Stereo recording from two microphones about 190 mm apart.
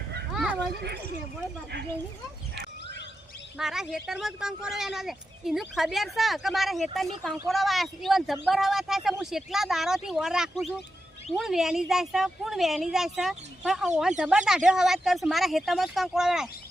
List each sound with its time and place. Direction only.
3.6 s speech: centre (ahead or behind)